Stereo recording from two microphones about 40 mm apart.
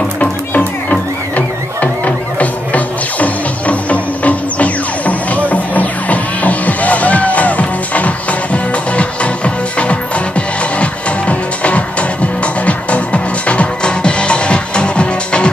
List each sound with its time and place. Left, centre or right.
0.2 s music: left